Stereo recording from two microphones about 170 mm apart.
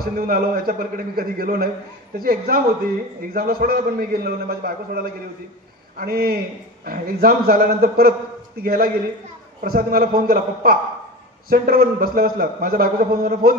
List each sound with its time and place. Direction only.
0.0 s a man's voice: 55° right (ahead or behind)